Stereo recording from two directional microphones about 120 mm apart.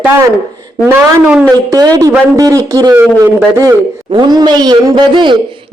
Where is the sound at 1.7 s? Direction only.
30° right (ahead or behind).